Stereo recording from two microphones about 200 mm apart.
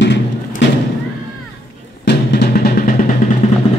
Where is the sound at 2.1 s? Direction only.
50° left (ahead or behind).